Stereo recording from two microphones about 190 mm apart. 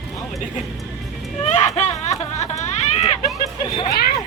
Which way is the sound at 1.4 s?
35° left (ahead or behind).